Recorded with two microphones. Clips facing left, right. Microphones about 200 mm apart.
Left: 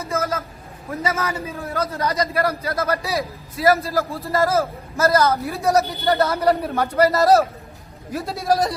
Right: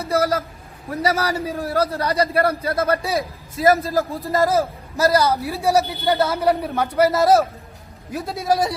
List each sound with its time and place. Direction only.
0.0 s a sound: 35° right (ahead or behind)
1.0 s a man's voice: 35° right (ahead or behind)
3.9 s a man's voice: 15° right (ahead or behind)
5.7 s speech: centre (ahead or behind)